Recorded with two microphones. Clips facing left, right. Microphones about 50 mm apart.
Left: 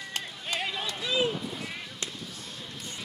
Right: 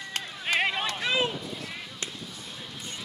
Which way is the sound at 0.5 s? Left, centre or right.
Right.